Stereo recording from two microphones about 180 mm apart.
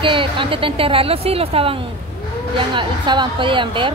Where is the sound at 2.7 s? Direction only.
25° right (ahead or behind).